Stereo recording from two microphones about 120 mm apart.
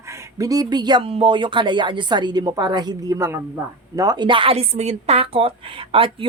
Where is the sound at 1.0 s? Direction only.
50° right (ahead or behind); by 3.4 s 25° right (ahead or behind).